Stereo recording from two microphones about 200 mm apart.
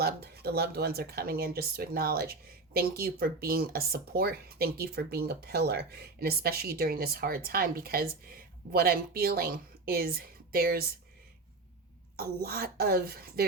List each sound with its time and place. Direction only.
0.0 s speech: 55° right (ahead or behind)
12.1 s speech: 50° right (ahead or behind)